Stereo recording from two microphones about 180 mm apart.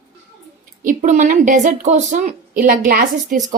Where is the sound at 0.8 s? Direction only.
45° right (ahead or behind).